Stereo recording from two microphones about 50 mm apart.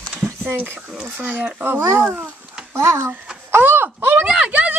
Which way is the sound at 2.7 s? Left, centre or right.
Right.